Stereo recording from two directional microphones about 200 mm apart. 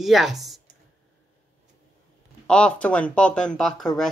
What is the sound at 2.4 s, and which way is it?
Speech, 5° left (ahead or behind).